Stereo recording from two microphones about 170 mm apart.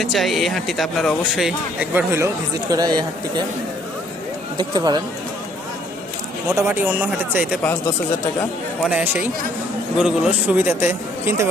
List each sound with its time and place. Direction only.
0.0 s speech: centre (ahead or behind); by 3.1 s 25° right (ahead or behind)
4.5 s speech: 25° right (ahead or behind)
6.5 s speech: 15° right (ahead or behind)
8.9 s speech: 10° right (ahead or behind)